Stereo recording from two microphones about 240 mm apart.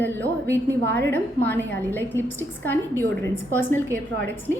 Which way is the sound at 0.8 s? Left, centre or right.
Right.